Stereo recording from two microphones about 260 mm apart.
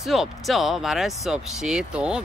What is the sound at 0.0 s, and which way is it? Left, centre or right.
Speech, centre.